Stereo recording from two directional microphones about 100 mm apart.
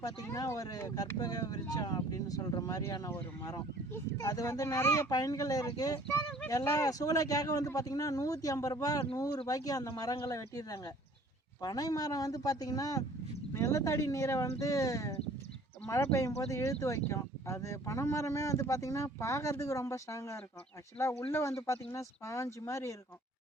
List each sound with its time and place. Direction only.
0.2 s speech: 35° left (ahead or behind)
5.0 s speech: 40° left (ahead or behind)